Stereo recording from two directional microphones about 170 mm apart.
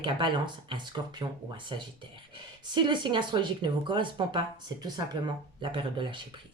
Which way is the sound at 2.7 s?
25° right (ahead or behind).